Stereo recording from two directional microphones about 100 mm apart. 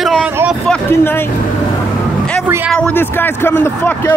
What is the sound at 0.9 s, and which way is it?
Speech, 25° left (ahead or behind).